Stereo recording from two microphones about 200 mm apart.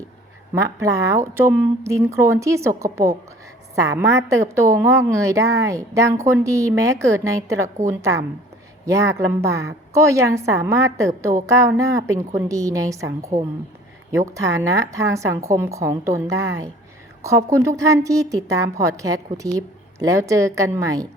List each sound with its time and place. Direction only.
0.5 s a woman's voice: 15° right (ahead or behind)